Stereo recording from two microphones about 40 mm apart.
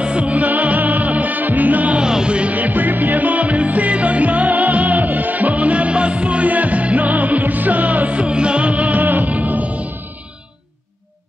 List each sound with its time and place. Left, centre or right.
0.0 s music: right
2.0 s music: right
2.5 s music: right
8.2 s music: right